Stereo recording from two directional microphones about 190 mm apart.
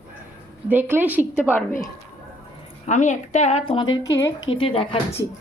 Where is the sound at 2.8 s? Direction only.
40° left (ahead or behind); by 4.5 s 20° left (ahead or behind).